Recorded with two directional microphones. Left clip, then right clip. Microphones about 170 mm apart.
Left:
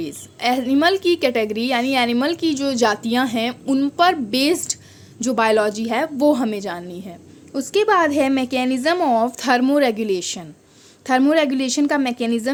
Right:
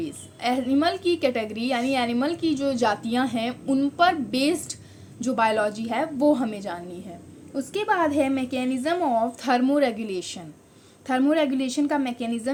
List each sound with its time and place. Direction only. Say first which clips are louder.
0.0 s a woman's voice: left 6 dB; 55° left (ahead or behind)